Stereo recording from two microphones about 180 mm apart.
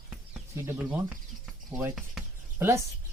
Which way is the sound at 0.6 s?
10° right (ahead or behind).